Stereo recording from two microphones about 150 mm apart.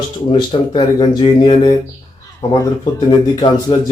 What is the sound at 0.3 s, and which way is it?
Speech, 30° left (ahead or behind).